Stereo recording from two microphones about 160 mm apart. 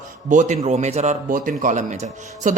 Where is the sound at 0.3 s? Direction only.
50° right (ahead or behind).